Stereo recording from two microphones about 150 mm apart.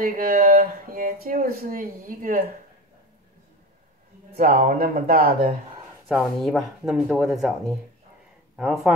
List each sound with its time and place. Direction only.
0.0 s speech: 70° right (ahead or behind)
4.3 s speech: 75° right (ahead or behind)
6.0 s speech: centre (ahead or behind)